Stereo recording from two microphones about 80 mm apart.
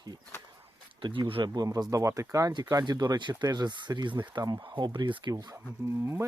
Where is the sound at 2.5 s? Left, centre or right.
Right.